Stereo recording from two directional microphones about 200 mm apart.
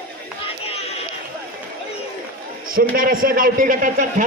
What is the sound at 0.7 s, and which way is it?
Chatter, 30° left (ahead or behind).